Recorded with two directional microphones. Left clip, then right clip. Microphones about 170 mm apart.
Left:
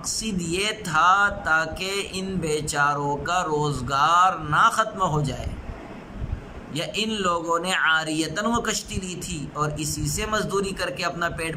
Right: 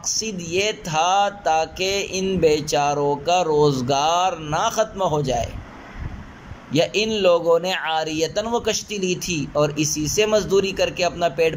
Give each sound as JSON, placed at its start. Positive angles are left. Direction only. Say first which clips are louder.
{"t": 0.5, "sound": "mantra", "louder": "right 3 dB", "side_deg": -15}
{"t": 6.7, "sound": "mantra", "louder": "right 8 dB", "side_deg": -15}